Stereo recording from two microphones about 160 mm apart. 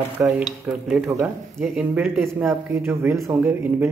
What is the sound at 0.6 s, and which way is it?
Speech, 15° right (ahead or behind).